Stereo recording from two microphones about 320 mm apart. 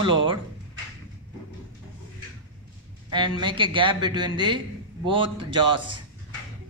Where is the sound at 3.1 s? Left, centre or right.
Centre.